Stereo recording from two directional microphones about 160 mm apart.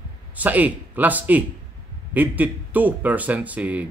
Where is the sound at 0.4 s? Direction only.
10° right (ahead or behind).